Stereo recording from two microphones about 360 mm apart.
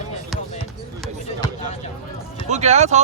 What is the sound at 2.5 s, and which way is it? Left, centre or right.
Speech, centre.